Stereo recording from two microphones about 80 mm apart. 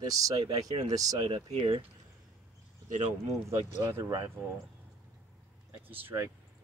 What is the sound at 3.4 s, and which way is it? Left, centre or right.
Speech, right.